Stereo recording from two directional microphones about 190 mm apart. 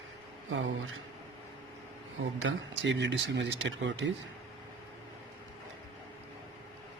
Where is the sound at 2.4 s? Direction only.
80° right.